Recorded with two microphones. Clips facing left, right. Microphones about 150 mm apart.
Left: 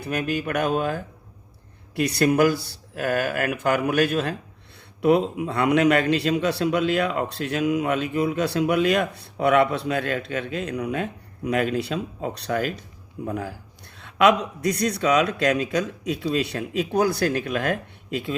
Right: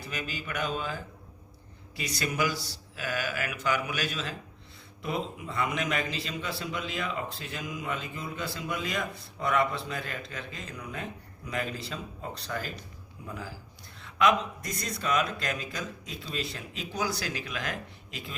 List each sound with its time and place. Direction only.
0.0 s speech: 60° left (ahead or behind)
5.0 s a man's voice: 70° left (ahead or behind)